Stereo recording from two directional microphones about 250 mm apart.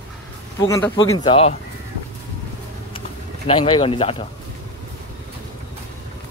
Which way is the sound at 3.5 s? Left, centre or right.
Centre.